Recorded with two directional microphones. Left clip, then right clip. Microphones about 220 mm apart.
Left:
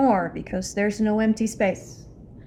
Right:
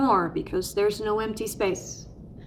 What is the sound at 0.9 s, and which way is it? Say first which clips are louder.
A woman's voice: left 2 dB; 15° right (ahead or behind).